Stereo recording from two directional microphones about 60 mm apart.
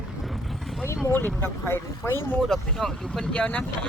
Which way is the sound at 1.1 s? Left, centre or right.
Left.